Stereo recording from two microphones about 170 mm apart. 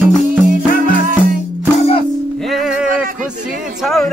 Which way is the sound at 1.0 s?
50° right (ahead or behind).